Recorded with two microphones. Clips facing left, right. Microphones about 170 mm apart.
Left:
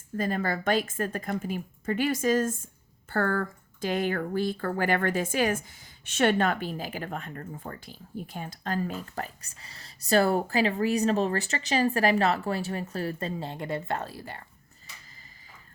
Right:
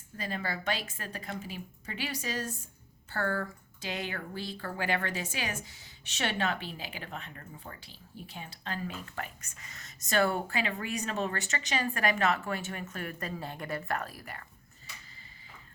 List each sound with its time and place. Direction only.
0.2 s a woman's voice: 45° left (ahead or behind); by 14.4 s 25° left (ahead or behind)